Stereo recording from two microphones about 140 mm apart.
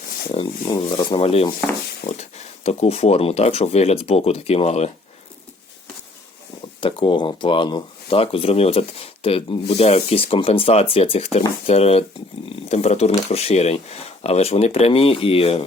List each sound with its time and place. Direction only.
0.3 s speech: 35° left (ahead or behind)
2.0 s speech: 90° left
2.6 s speech: 45° left (ahead or behind)
6.7 s speech: 35° left (ahead or behind)